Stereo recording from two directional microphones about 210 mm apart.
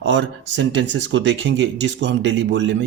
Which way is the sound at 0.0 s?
60° right (ahead or behind).